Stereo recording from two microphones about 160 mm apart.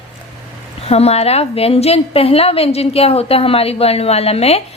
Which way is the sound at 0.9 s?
40° left (ahead or behind).